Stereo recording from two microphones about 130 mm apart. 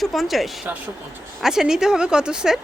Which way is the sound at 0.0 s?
Centre (ahead or behind).